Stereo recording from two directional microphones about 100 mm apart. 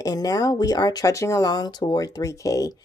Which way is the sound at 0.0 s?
40° left (ahead or behind).